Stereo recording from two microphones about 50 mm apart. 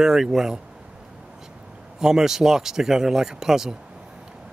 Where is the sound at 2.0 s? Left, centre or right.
Centre.